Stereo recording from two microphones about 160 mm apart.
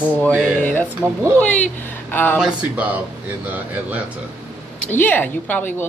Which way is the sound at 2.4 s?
5° right (ahead or behind).